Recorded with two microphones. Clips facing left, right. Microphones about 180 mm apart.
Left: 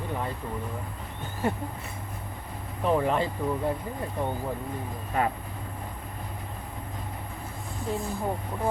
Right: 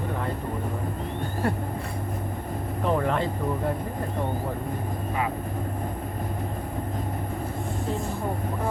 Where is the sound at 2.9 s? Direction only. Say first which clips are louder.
Left 1 dB; 5° left (ahead or behind).